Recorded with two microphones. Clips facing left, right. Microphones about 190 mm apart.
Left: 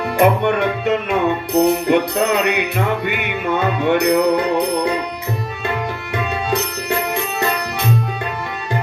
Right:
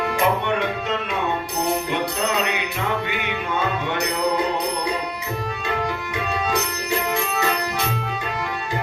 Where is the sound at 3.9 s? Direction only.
60° left (ahead or behind).